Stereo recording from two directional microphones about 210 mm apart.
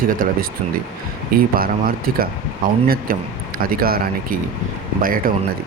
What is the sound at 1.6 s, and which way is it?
Speech, 45° right (ahead or behind).